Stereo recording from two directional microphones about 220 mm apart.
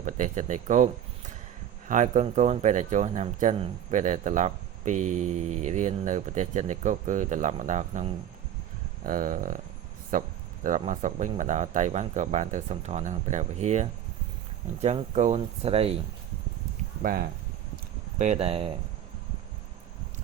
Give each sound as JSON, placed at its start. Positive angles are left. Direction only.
{"t": 0.0, "sound": "speech", "side_deg": -35}
{"t": 1.9, "sound": "speech", "side_deg": -35}
{"t": 17.0, "sound": "speech", "side_deg": -40}
{"t": 18.2, "sound": "speech", "side_deg": -30}